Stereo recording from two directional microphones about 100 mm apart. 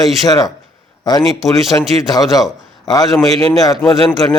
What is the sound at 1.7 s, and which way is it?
A man's voice, 30° left (ahead or behind).